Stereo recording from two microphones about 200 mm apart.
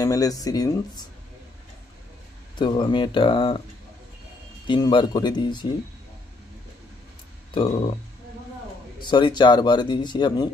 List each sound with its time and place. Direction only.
0.0 s speech: 15° left (ahead or behind)
2.5 s speech: 25° left (ahead or behind)
4.6 s speech: 25° left (ahead or behind)
7.5 s speech: 25° left (ahead or behind)
9.1 s speech: 20° left (ahead or behind)